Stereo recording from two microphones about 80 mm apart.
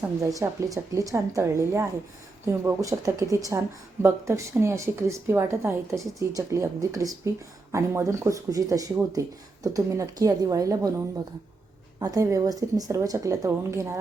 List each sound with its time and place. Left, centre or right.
0.2 s a woman's voice: right